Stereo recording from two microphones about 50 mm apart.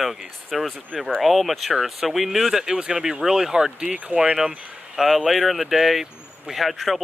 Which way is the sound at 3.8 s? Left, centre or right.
Right.